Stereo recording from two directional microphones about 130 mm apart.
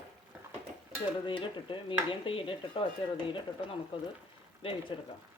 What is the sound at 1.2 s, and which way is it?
Stir, 40° left (ahead or behind).